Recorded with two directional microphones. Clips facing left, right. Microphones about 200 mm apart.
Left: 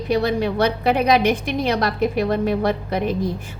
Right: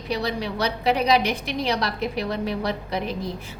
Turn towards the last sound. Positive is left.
turn(degrees=50)  # may be behind; listen again after turning